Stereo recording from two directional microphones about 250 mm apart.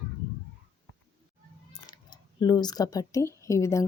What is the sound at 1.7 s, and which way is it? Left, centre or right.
Speech, centre.